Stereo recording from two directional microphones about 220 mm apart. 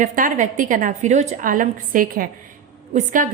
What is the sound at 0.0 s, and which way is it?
A woman's voice, 35° right (ahead or behind).